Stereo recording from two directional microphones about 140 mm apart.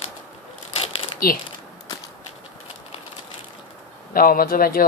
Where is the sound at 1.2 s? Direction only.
90° left.